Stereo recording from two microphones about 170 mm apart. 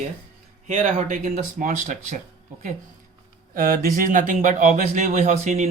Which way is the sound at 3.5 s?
55° right (ahead or behind).